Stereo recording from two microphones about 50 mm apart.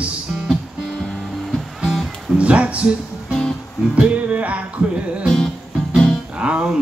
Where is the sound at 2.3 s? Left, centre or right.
Right.